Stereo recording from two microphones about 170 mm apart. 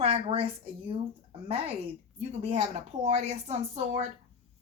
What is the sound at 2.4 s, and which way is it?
Speech, 40° right (ahead or behind).